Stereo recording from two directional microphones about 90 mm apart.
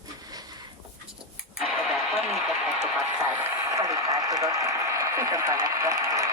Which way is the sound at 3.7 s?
40° right (ahead or behind).